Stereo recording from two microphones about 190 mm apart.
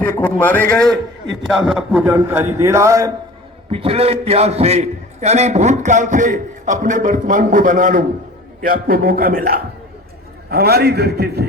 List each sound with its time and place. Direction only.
0.0 s a man's voice: 10° left (ahead or behind); by 3.1 s 15° right (ahead or behind)
3.7 s a man's voice: 30° right (ahead or behind); by 11.4 s 60° right (ahead or behind)